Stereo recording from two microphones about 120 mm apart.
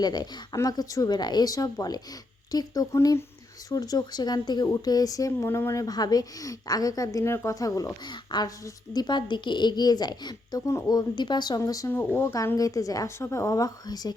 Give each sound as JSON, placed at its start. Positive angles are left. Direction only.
{"t": 0.0, "sound": "a woman's voice", "side_deg": 35}
{"t": 8.0, "sound": "a woman's voice", "side_deg": 40}
{"t": 11.9, "sound": "speech", "side_deg": 20}